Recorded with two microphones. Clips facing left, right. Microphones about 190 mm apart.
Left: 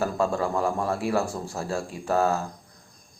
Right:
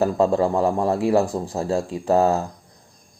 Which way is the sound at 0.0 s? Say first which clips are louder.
Right 7 dB; 30° right (ahead or behind).